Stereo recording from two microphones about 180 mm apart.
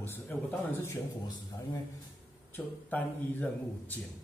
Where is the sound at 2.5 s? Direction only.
10° left (ahead or behind).